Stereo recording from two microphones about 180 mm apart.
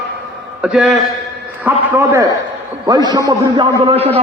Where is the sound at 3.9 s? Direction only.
35° right (ahead or behind).